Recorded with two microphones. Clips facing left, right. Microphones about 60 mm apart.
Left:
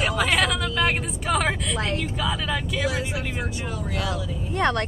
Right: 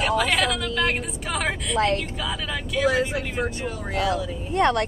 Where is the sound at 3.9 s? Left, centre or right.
Right.